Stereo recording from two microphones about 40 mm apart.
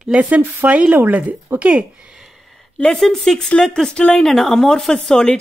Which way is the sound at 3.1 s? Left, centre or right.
Centre.